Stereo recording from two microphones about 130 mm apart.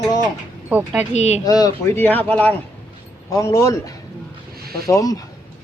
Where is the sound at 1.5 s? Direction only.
30° left (ahead or behind).